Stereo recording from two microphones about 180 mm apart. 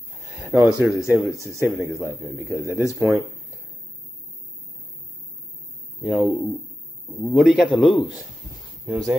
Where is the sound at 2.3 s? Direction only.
15° right (ahead or behind).